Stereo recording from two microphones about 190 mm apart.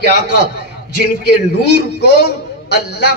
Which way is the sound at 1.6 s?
60° left (ahead or behind).